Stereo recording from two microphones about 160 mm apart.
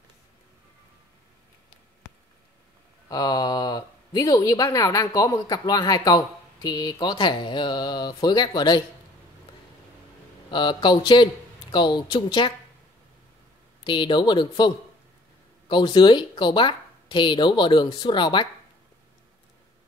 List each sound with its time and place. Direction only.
3.1 s speech: 25° left (ahead or behind)
10.5 s speech: 30° left (ahead or behind)
13.8 s speech: 30° left (ahead or behind)
15.7 s speech: 30° left (ahead or behind)